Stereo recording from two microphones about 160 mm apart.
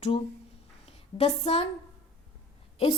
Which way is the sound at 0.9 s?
40° left (ahead or behind).